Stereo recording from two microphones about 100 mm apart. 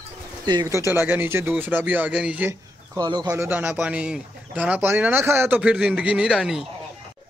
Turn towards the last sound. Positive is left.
turn(degrees=-5)  # may be behind; listen again after turning